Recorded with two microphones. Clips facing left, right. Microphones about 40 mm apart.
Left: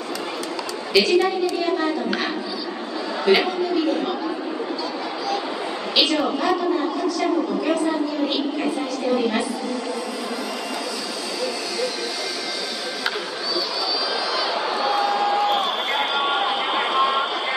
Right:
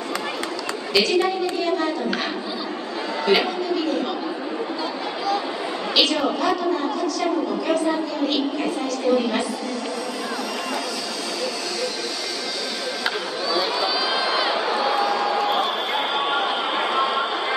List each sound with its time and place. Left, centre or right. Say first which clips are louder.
0.9 s a woman's voice: left 2 dB; centre
3.3 s a woman's voice: left 2 dB; centre
5.9 s a woman's voice: even; centre
14.1 s crowd: right 2 dB; right
14.6 s crowd: right 1 dB; centre
15.0 s a sound: left 1 dB; centre
16.2 s chatter: left 1 dB; centre